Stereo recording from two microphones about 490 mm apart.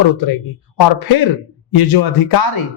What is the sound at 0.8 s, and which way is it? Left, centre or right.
A man's voice, left.